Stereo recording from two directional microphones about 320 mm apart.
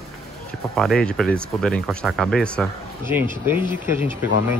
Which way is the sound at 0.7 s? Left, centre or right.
Centre.